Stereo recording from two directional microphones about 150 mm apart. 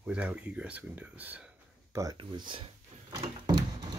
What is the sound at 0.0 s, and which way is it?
Speech, 10° right (ahead or behind).